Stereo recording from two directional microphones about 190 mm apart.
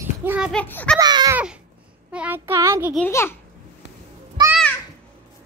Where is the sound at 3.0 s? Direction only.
15° left (ahead or behind).